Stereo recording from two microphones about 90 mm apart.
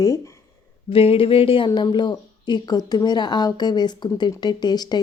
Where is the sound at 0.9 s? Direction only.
90° left.